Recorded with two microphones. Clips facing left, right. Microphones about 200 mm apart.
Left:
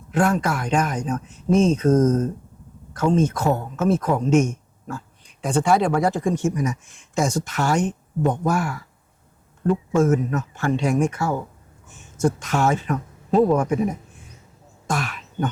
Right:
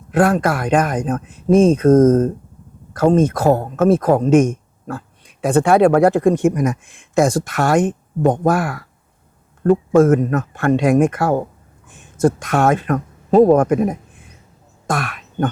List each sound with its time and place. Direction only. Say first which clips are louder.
0.1 s speech: right 5 dB; 55° right (ahead or behind)
9.6 s speech: right 7 dB; 55° right (ahead or behind)
14.9 s throat clearing: right 3 dB; 60° right (ahead or behind)